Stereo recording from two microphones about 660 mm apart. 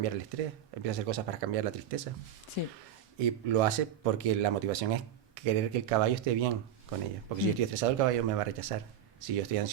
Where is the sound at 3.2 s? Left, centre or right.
Right.